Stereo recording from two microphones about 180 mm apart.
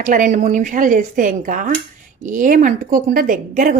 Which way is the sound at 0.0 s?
45° right (ahead or behind).